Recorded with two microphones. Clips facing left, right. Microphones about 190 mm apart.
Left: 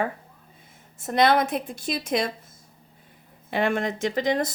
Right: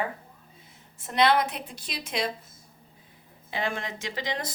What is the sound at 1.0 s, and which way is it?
Speech, 45° left (ahead or behind).